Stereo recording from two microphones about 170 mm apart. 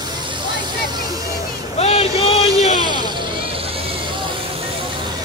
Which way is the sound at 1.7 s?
35° left (ahead or behind).